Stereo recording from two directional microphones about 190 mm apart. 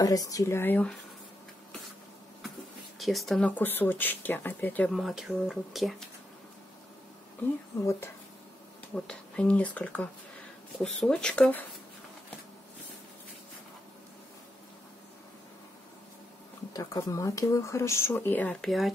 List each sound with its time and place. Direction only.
0.0 s speech: 20° left (ahead or behind)
3.0 s speech: centre (ahead or behind)
8.9 s speech: 5° left (ahead or behind)
16.7 s speech: 15° left (ahead or behind); by 18.9 s centre (ahead or behind)